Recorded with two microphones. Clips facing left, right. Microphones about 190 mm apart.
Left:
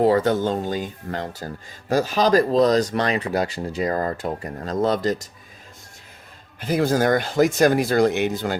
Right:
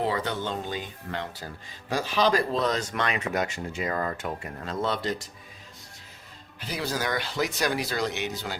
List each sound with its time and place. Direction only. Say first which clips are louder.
0.0 s speech: left 10 dB; 45° left (ahead or behind)
6.6 s speech: left 11 dB; 50° left (ahead or behind)